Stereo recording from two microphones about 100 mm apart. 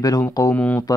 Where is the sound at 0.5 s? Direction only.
15° left (ahead or behind).